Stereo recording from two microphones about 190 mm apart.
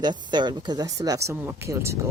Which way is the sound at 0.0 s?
25° right (ahead or behind).